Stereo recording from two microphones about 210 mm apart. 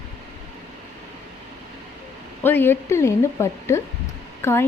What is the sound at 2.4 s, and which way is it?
Speech, 10° left (ahead or behind).